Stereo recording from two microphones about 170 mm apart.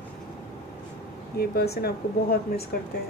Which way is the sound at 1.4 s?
65° left (ahead or behind).